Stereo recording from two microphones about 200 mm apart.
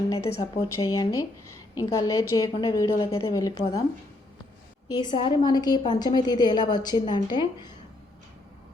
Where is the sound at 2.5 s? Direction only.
25° left (ahead or behind).